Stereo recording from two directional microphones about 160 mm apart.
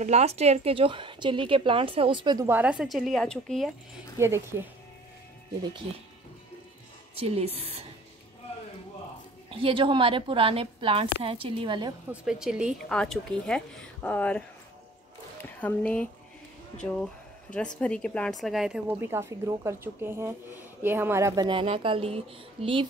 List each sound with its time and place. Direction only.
0.0 s speech: 45° right (ahead or behind)
2.4 s speech: 10° right (ahead or behind)
4.2 s a woman's voice: 15° right (ahead or behind)
7.2 s speech: 40° right (ahead or behind)
9.5 s speech: 35° right (ahead or behind)
12.1 s speech: 5° right (ahead or behind)
15.6 s speech: 10° left (ahead or behind)
17.7 s a woman's voice: 5° left (ahead or behind); by 21.5 s 15° right (ahead or behind)
21.5 s speech: 35° right (ahead or behind)